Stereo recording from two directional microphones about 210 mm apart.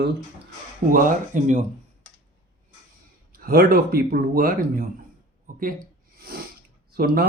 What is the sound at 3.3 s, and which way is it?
Speech, 45° right (ahead or behind).